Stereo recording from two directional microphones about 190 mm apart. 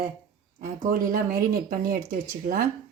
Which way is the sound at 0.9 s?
50° right (ahead or behind).